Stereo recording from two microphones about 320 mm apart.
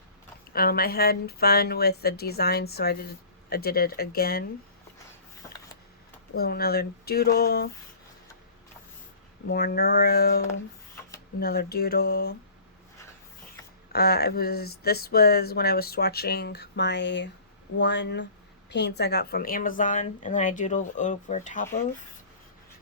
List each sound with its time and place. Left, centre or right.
0.5 s speech: left
6.3 s speech: left
9.5 s speech: left
13.9 s speech: left